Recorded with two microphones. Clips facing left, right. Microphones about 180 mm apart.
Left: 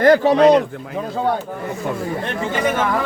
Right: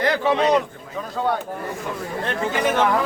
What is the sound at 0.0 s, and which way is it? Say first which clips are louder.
Speech: left 7 dB; 45° left (ahead or behind).